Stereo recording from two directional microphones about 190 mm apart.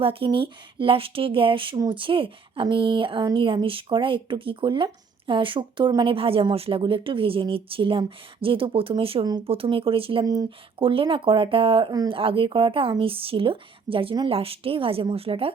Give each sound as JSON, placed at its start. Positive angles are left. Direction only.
{"t": 0.0, "sound": "speech", "side_deg": -30}